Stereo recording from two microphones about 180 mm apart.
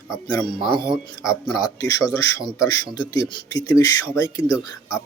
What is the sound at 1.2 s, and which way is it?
Speech, 20° left (ahead or behind).